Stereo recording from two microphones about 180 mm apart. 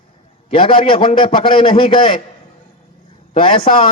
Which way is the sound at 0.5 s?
30° left (ahead or behind).